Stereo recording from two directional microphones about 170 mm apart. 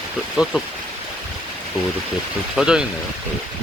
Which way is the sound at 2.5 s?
5° right (ahead or behind).